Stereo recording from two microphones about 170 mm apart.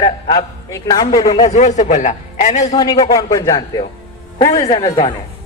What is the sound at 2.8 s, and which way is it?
A man's voice, 25° left (ahead or behind).